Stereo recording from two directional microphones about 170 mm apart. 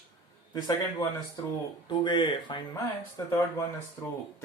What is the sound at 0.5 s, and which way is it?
Speech, 25° left (ahead or behind).